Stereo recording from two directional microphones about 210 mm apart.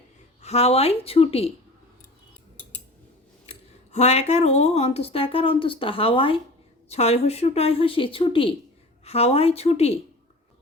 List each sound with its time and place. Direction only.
0.4 s speech: 30° left (ahead or behind)
3.9 s speech: 30° left (ahead or behind)